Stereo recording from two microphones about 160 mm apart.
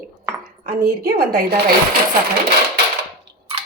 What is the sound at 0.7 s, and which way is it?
Speech, 70° right (ahead or behind).